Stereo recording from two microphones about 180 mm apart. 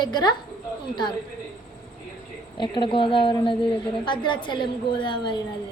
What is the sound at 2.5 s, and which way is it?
A woman's voice, 25° left (ahead or behind).